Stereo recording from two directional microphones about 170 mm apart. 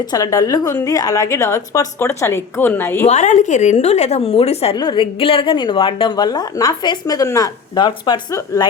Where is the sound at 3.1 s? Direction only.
45° left (ahead or behind).